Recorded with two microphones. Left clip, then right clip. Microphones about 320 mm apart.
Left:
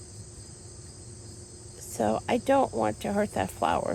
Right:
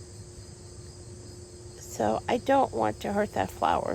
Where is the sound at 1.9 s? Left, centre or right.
Right.